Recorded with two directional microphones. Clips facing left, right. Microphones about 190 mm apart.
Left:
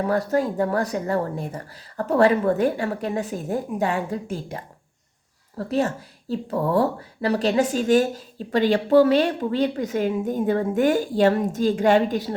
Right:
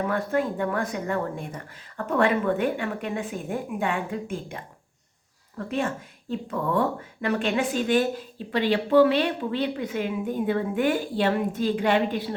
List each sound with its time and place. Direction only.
0.1 s a woman's voice: 40° left (ahead or behind)